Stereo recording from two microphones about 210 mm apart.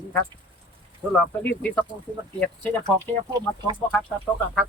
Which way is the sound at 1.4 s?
10° left (ahead or behind).